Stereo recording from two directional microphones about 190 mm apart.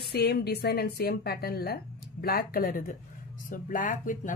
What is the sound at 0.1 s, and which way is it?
A woman's voice, 60° left (ahead or behind).